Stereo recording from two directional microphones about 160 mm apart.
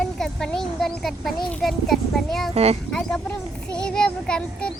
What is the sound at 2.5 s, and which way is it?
Speech, 40° right (ahead or behind).